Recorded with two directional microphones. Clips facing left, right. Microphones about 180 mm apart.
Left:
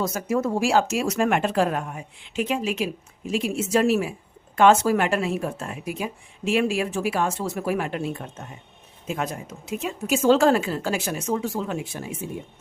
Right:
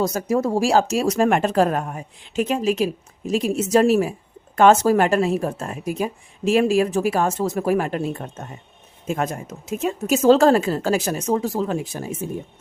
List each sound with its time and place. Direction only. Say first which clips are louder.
0.0 s speech: right 3 dB; 35° right (ahead or behind)